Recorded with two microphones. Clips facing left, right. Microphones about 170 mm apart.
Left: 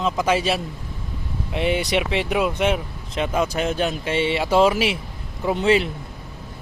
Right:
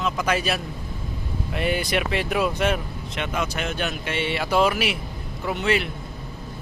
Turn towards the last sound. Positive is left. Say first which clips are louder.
# left 5 dB
turn(degrees=30)  # may be behind; listen again after turning